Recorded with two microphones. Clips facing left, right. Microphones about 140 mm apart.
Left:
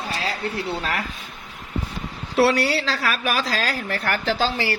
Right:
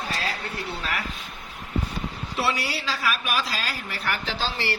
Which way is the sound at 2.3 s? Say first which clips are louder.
Left 9 dB; 75° left (ahead or behind).